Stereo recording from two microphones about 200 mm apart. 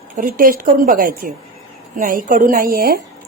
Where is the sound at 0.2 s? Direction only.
45° right (ahead or behind).